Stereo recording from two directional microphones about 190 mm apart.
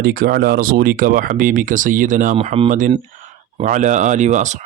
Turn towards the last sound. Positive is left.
turn(degrees=-40)  # may be behind; listen again after turning